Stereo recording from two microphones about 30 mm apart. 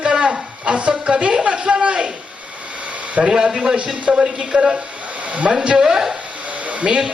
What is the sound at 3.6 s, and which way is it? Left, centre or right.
Speech, right.